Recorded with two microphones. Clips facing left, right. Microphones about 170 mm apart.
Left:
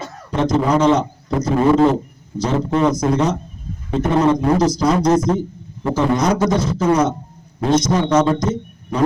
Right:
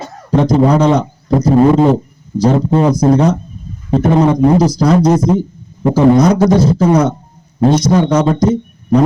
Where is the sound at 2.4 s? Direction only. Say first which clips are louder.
Right 5 dB; 30° right (ahead or behind).